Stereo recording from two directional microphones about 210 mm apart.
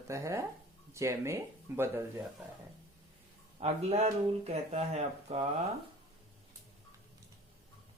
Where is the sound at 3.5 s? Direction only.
30° right (ahead or behind).